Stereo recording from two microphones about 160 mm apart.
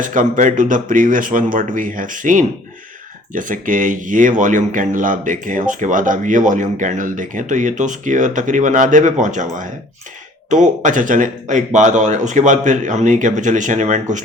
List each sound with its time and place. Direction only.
0.0 s speech: 55° right (ahead or behind)